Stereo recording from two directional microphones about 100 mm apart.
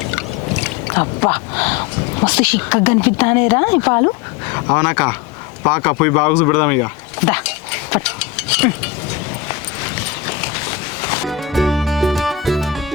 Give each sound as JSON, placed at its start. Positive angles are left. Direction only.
{"t": 0.9, "sound": "speech", "side_deg": 25}
{"t": 5.6, "sound": "vehicle", "side_deg": 30}
{"t": 9.5, "sound": "a sound", "side_deg": 25}
{"t": 11.3, "sound": "music", "side_deg": 0}